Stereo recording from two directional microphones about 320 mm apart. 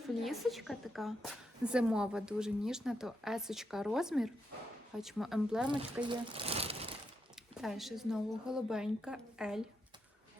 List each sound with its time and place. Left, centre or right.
0.2 s a woman's voice: centre
6.1 s crumpling: centre
7.6 s a woman's voice: centre